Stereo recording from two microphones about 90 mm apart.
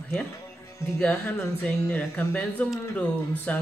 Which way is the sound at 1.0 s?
20° left (ahead or behind).